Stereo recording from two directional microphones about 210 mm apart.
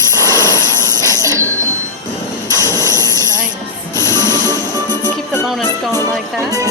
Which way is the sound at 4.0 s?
15° left (ahead or behind).